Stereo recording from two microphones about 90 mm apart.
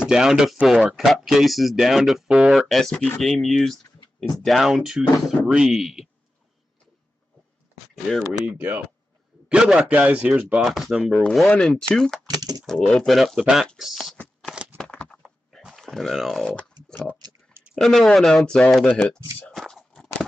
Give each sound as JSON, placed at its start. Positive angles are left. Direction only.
{"t": 0.0, "sound": "speech", "side_deg": -5}
{"t": 7.9, "sound": "speech", "side_deg": 5}
{"t": 8.3, "sound": "speech", "side_deg": -20}
{"t": 9.5, "sound": "speech", "side_deg": -10}
{"t": 10.6, "sound": "speech", "side_deg": -5}
{"t": 11.4, "sound": "speech", "side_deg": 10}
{"t": 12.4, "sound": "speech", "side_deg": -45}
{"t": 12.6, "sound": "speech", "side_deg": 5}
{"t": 14.1, "sound": "shuffling cards", "side_deg": 10}
{"t": 14.8, "sound": "a sound", "side_deg": 10}
{"t": 15.2, "sound": "a sound", "side_deg": 0}
{"t": 17.7, "sound": "speech", "side_deg": 5}
{"t": 18.9, "sound": "speech", "side_deg": 15}
{"t": 19.5, "sound": "a sound", "side_deg": 0}